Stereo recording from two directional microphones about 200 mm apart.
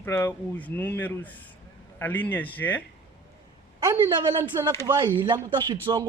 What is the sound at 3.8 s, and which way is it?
A man's voice, 20° right (ahead or behind).